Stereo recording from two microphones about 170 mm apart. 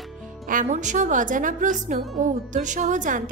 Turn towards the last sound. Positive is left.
turn(degrees=-50)  # may be behind; listen again after turning